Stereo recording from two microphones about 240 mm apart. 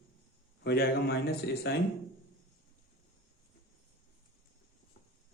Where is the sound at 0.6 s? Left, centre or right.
Left.